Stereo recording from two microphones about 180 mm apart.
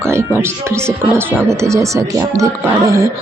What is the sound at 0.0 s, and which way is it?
Speech, 15° right (ahead or behind).